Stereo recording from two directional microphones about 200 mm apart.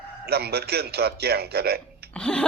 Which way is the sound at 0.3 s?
50° right (ahead or behind).